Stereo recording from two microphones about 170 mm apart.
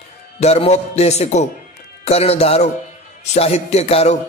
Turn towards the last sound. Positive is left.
turn(degrees=35)  # may be behind; listen again after turning